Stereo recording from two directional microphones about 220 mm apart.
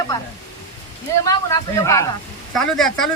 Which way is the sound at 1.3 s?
15° left (ahead or behind).